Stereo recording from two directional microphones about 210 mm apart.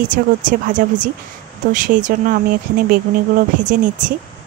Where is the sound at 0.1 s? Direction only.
40° right (ahead or behind).